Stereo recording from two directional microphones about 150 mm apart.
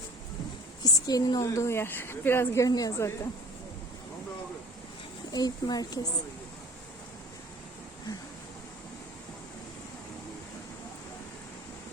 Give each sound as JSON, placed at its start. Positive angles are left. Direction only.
{"t": 0.8, "sound": "a woman's voice", "side_deg": 25}
{"t": 5.3, "sound": "a woman's voice", "side_deg": 25}